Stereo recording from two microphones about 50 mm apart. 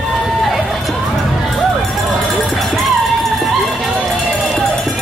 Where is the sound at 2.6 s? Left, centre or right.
Centre.